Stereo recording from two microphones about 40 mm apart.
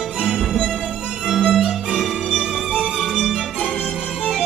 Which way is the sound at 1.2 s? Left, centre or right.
Centre.